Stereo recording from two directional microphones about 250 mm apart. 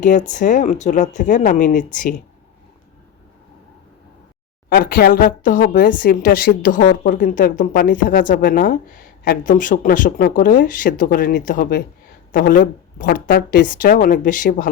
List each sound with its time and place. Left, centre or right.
0.0 s speech: left
4.7 s speech: left